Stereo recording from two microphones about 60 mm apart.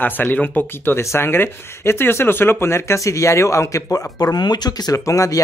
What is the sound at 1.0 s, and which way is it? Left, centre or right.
Speech, left.